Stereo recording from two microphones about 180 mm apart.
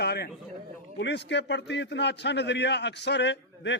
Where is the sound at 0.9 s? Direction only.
70° left (ahead or behind).